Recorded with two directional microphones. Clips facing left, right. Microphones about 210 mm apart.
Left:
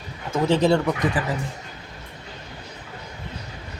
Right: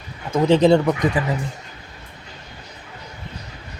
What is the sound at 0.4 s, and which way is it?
Speech, 20° right (ahead or behind).